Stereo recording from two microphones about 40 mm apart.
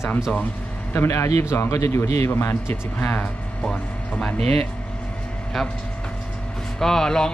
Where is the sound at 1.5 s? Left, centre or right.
Left.